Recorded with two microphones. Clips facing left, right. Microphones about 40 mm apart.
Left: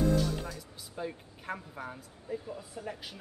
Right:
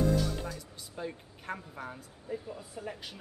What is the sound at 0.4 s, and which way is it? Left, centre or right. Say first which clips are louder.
Speech: right 1 dB; centre.